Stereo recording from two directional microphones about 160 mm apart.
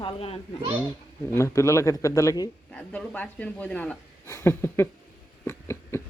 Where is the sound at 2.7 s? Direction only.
5° left (ahead or behind).